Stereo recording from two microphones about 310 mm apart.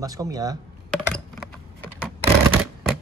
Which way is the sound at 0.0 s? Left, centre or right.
Centre.